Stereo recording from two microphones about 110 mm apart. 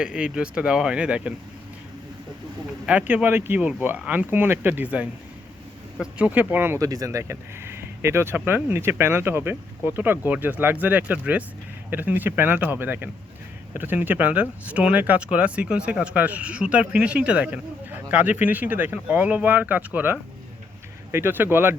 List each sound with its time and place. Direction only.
0.0 s speech: 10° right (ahead or behind)
2.8 s speech: 15° right (ahead or behind)
6.8 s speech: 30° right (ahead or behind)